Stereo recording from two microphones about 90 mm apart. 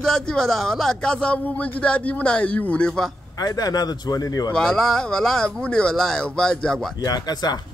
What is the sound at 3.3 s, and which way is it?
Speech, 45° left (ahead or behind).